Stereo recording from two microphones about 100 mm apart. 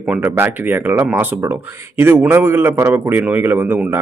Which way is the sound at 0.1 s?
20° right (ahead or behind).